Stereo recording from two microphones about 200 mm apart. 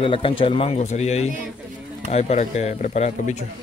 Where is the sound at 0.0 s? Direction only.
25° left (ahead or behind).